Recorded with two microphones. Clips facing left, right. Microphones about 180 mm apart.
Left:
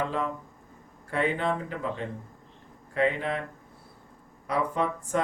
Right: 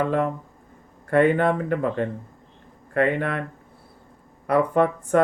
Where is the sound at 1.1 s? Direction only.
55° right (ahead or behind).